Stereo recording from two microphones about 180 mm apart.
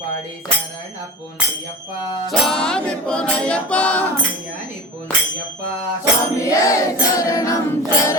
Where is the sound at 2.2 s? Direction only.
Centre (ahead or behind).